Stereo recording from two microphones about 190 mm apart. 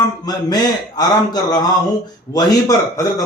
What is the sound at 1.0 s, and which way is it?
Speech, 20° left (ahead or behind).